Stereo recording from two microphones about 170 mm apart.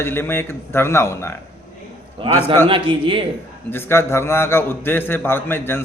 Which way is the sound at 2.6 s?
30° right (ahead or behind).